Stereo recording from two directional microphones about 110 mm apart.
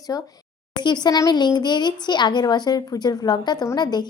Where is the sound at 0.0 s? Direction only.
35° left (ahead or behind).